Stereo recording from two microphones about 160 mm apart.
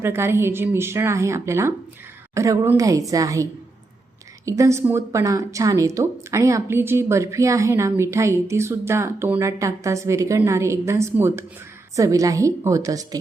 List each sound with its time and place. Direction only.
0.0 s a woman's voice: 15° right (ahead or behind)